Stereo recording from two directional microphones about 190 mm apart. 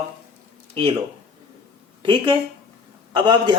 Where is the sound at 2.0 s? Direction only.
25° right (ahead or behind).